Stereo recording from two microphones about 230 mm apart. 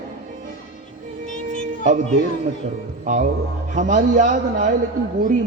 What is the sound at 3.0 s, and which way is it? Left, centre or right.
A man's voice, right.